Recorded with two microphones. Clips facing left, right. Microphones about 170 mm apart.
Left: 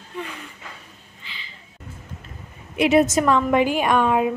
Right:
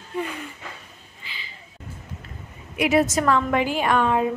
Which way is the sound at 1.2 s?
5° right (ahead or behind).